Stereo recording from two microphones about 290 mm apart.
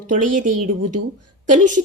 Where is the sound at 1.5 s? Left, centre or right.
Right.